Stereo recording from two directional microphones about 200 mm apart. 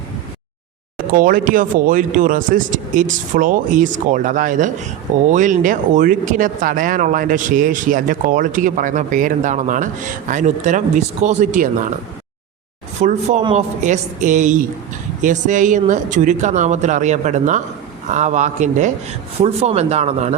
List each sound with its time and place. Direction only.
1.1 s speech: 45° right (ahead or behind)
13.0 s speech: 35° right (ahead or behind)